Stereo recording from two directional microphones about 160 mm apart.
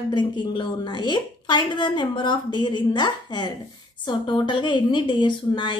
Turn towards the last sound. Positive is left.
turn(degrees=30)  # may be behind; listen again after turning